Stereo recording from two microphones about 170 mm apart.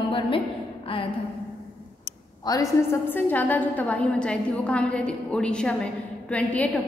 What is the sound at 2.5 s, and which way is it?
A woman's voice, 15° left (ahead or behind).